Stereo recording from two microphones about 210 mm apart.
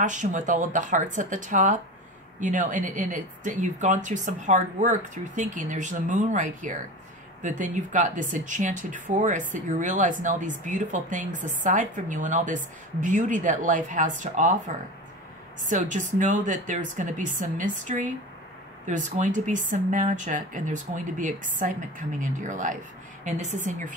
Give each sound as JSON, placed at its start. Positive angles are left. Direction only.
{"t": 0.0, "sound": "speech", "side_deg": -35}
{"t": 15.6, "sound": "speech", "side_deg": -35}